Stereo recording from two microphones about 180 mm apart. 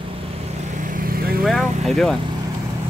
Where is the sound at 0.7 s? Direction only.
45° right (ahead or behind).